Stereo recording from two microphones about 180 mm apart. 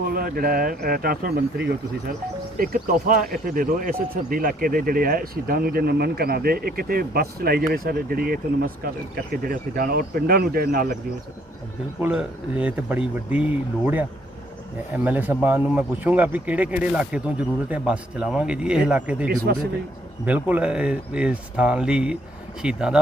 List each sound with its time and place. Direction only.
0.0 s speech: 55° right (ahead or behind)
11.9 s speech: 10° right (ahead or behind)
15.0 s speech: 10° right (ahead or behind)